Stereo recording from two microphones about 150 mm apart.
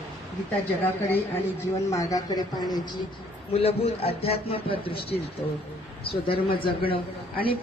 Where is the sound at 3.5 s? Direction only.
40° left (ahead or behind).